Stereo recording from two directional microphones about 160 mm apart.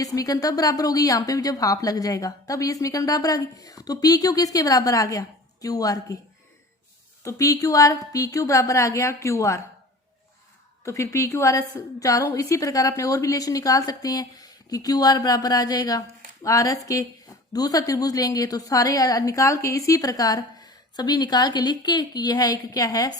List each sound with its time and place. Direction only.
0.0 s a woman's voice: 20° left (ahead or behind)
7.3 s a woman's voice: 20° left (ahead or behind)
10.8 s a woman's voice: 20° left (ahead or behind)